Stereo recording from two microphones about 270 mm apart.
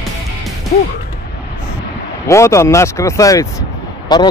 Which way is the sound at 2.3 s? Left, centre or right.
Centre.